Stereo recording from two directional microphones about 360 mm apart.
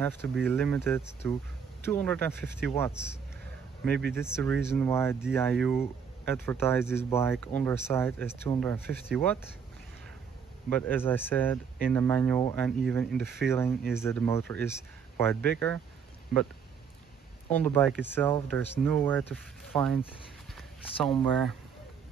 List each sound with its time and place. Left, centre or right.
0.0 s speech: centre
10.7 s speech: centre
17.5 s speech: centre
20.5 s a sound: centre
21.2 s speech: centre